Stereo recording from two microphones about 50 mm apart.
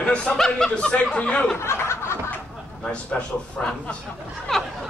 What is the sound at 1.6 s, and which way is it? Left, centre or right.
Snicker, left.